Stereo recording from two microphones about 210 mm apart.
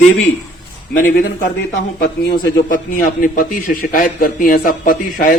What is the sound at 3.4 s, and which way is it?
A man's voice, 40° left (ahead or behind).